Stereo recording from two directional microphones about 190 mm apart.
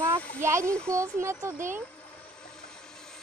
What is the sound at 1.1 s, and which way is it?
Speech, 15° right (ahead or behind).